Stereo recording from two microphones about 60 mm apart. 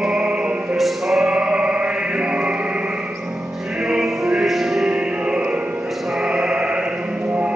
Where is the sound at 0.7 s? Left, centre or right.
Centre.